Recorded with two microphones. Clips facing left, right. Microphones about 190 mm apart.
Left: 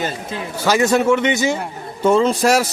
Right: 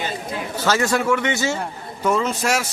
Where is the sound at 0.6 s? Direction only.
15° left (ahead or behind).